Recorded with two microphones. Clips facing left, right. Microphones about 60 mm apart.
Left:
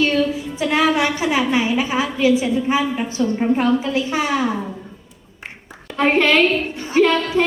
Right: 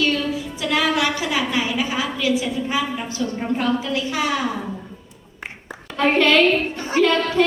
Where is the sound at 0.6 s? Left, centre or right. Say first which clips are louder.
Left 3 dB; left.